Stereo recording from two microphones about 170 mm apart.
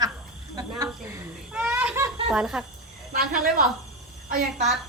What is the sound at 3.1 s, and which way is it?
Speech, 55° right (ahead or behind).